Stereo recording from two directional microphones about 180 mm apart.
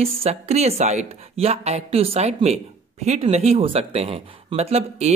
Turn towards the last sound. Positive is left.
turn(degrees=-35)  # may be behind; listen again after turning